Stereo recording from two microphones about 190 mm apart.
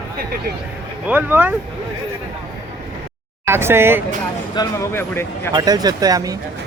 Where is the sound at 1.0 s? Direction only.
10° right (ahead or behind).